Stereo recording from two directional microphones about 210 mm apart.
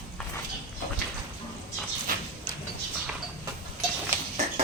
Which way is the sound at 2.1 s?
40° right (ahead or behind).